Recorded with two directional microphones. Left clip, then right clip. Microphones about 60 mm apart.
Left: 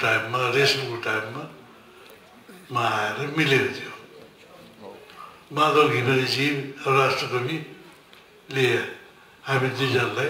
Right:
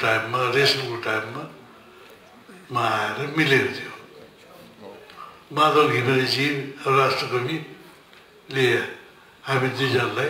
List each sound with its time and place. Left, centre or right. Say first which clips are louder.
0.0 s a man's voice: right 1 dB; right
2.7 s a man's voice: right 1 dB; right
5.5 s a man's voice: right 1 dB; right